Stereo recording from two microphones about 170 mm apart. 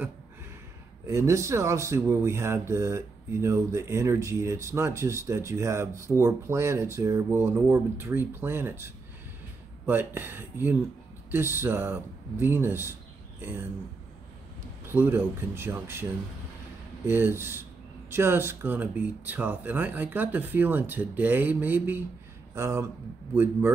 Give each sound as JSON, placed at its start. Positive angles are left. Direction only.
{"t": 1.0, "sound": "speech", "side_deg": -20}
{"t": 14.9, "sound": "speech", "side_deg": -10}